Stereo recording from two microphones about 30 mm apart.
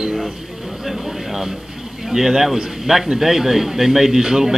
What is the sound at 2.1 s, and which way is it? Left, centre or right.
A man's voice, centre.